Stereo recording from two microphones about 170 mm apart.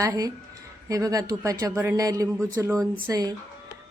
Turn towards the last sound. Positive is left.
turn(degrees=-20)  # may be behind; listen again after turning